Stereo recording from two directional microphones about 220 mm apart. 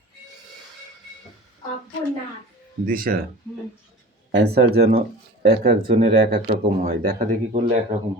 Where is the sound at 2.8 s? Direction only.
40° right (ahead or behind).